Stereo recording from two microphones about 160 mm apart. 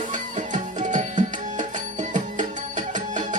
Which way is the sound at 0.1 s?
50° right (ahead or behind).